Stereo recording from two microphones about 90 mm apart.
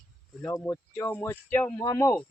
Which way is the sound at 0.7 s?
20° left (ahead or behind).